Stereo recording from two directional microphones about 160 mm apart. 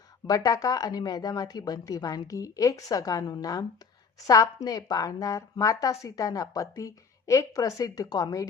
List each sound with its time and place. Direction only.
0.3 s speech: 20° left (ahead or behind)